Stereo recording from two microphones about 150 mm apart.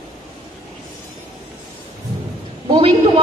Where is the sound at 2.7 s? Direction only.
40° right (ahead or behind).